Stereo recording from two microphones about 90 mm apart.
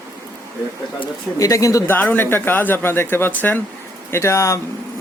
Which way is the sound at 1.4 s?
40° left (ahead or behind).